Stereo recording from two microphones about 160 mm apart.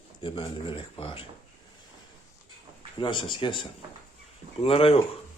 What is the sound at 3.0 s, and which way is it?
Speech, 30° left (ahead or behind).